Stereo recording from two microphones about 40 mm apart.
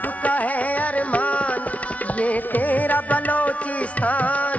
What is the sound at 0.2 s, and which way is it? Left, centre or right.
Music, left.